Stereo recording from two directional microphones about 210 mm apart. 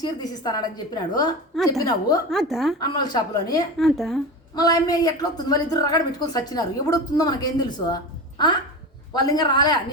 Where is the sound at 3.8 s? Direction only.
Centre (ahead or behind).